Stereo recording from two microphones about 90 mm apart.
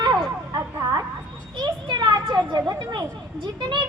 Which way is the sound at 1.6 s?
55° right (ahead or behind).